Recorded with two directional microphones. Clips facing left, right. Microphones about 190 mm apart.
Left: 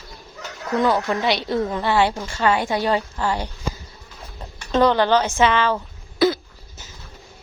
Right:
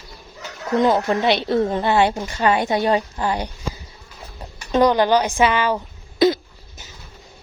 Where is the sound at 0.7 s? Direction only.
20° right (ahead or behind).